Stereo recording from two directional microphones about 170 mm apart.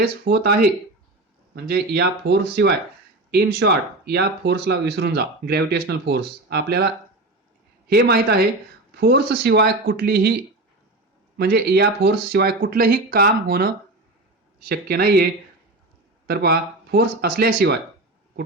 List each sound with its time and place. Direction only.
0.0 s speech: 75° right (ahead or behind)
1.5 s speech: 70° right (ahead or behind)
3.3 s speech: 70° right (ahead or behind)
14.7 s speech: 65° right (ahead or behind)